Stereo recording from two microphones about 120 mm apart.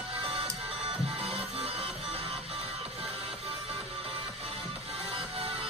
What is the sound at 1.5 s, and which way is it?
Music, 50° right (ahead or behind).